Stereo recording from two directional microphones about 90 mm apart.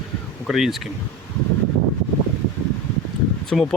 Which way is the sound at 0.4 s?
Centre (ahead or behind).